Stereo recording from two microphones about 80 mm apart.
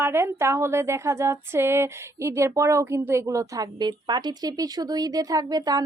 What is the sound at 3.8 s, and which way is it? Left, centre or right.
A woman's voice, right.